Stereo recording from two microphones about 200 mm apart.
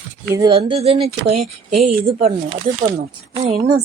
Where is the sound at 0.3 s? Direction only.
25° right (ahead or behind).